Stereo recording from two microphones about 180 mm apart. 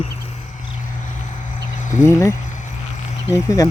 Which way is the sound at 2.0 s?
15° left (ahead or behind).